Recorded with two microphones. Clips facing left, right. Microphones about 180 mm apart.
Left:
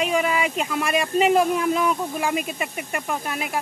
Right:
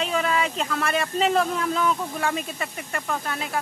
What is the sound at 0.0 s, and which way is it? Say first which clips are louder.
Speech: left 2 dB; 10° left (ahead or behind).